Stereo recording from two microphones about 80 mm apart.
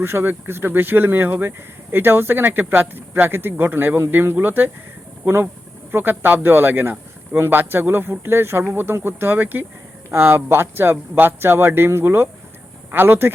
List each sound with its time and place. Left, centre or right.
0.0 s speech: right